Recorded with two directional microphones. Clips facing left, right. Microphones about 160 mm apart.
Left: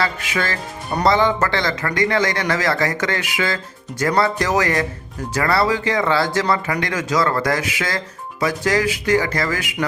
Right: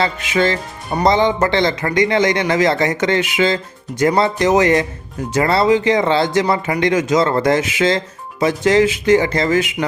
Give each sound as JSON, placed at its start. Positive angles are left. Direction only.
{"t": 0.0, "sound": "speech", "side_deg": -20}